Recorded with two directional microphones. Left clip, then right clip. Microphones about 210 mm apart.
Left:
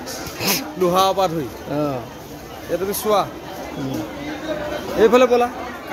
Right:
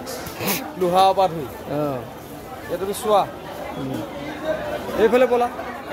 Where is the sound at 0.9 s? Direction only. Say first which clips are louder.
Right 1 dB; 40° left (ahead or behind).